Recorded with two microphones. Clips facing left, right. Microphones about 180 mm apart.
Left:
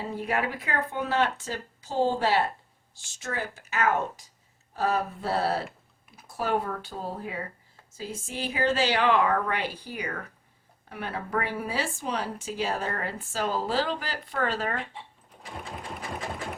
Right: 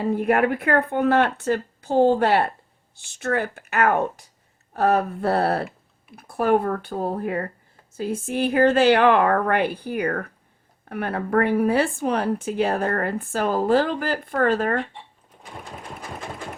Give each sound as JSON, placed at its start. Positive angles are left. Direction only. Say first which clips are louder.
{"t": 0.0, "sound": "speech", "louder": "right 9 dB", "side_deg": -55}
{"t": 15.4, "sound": "sewing machine", "louder": "right 1 dB", "side_deg": 0}